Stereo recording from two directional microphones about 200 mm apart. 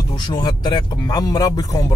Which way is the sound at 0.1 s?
20° left (ahead or behind).